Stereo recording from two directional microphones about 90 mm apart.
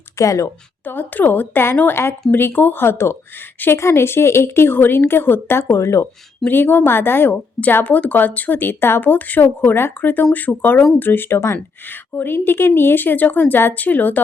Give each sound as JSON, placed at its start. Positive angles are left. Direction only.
{"t": 0.2, "sound": "a woman's voice", "side_deg": 35}
{"t": 0.9, "sound": "speech", "side_deg": 20}
{"t": 6.4, "sound": "speech", "side_deg": 20}